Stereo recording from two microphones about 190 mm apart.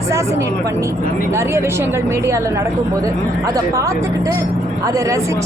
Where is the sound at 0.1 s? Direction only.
15° right (ahead or behind).